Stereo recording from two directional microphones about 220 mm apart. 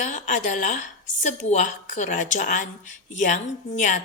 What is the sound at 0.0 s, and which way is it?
A woman's voice, 35° left (ahead or behind).